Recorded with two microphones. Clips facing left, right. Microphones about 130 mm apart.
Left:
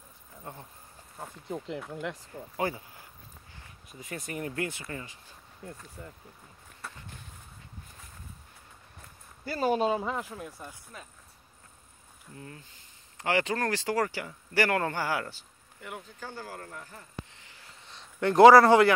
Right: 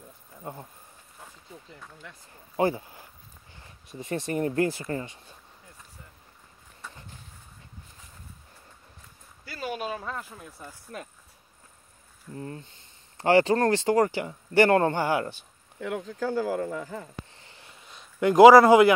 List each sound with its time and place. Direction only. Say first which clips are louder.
0.4 s speech: right 5 dB; 20° right (ahead or behind)
1.9 s speech: left 12 dB; 85° left
2.5 s speech: right 7 dB; 30° right (ahead or behind)
6.0 s speech: left 9 dB; 90° left
9.5 s speech: left 7 dB; 35° left (ahead or behind); by 10.3 s 15° left (ahead or behind)
10.3 s speech: left 3 dB; centre (ahead or behind)
12.4 s speech: right 8 dB; 35° right (ahead or behind)
16.1 s speech: right 14 dB; 90° right
17.4 s a sound: right 3 dB; 30° right (ahead or behind)
17.6 s a sound: left 1 dB; 10° right (ahead or behind)